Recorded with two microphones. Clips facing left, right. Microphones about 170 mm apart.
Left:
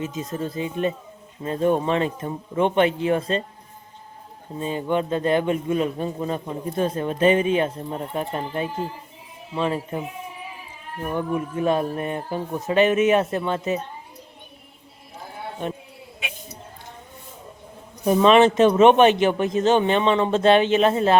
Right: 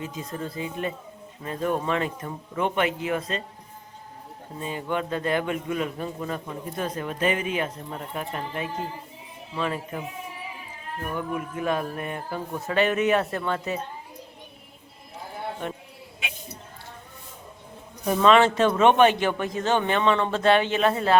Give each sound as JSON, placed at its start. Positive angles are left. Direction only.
{"t": 0.0, "sound": "a man's voice", "side_deg": 20}
{"t": 4.6, "sound": "a man's voice", "side_deg": 25}
{"t": 11.0, "sound": "a man's voice", "side_deg": 30}
{"t": 15.6, "sound": "a sound", "side_deg": 20}
{"t": 18.0, "sound": "a man's voice", "side_deg": 20}